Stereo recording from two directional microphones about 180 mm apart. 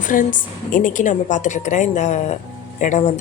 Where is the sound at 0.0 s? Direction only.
45° left (ahead or behind).